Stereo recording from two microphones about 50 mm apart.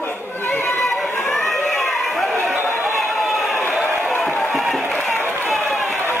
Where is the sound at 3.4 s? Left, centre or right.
Left.